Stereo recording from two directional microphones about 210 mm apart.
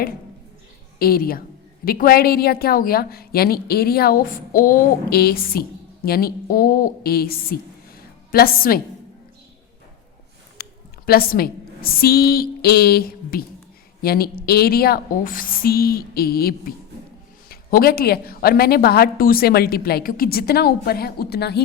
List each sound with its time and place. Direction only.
0.9 s a woman's voice: 45° left (ahead or behind)
10.6 s a woman's voice: 45° left (ahead or behind)